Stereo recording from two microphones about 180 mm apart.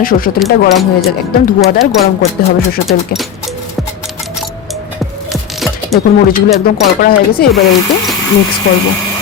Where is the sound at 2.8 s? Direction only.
Centre (ahead or behind).